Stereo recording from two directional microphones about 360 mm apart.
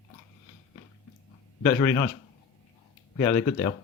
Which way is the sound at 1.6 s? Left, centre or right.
Centre.